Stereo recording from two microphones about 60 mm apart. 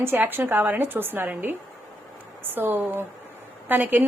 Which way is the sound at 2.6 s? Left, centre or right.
Right.